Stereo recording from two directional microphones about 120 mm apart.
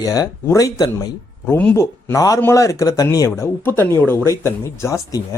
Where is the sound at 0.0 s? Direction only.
30° left (ahead or behind).